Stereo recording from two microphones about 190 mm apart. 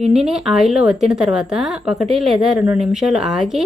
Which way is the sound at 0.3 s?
5° right (ahead or behind).